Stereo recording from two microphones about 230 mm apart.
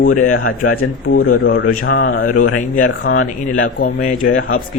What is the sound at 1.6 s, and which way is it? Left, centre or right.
Speech, left.